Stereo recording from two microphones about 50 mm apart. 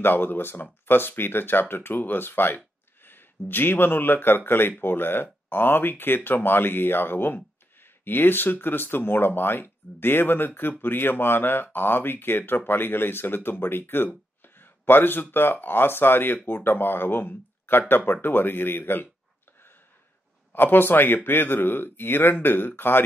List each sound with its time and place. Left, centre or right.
0.0 s speech: left
20.5 s speech: left